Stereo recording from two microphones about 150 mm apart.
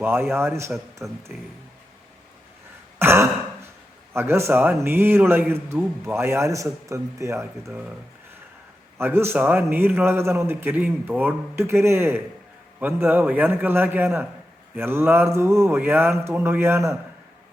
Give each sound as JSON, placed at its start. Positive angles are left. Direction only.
{"t": 0.0, "sound": "a man's voice", "side_deg": -15}
{"t": 1.0, "sound": "a man's voice", "side_deg": -5}
{"t": 3.0, "sound": "throat clearing", "side_deg": -15}
{"t": 4.1, "sound": "a man's voice", "side_deg": -15}
{"t": 9.0, "sound": "a man's voice", "side_deg": -15}